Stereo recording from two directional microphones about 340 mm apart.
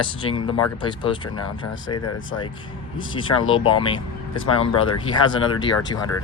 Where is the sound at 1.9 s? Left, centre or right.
Left.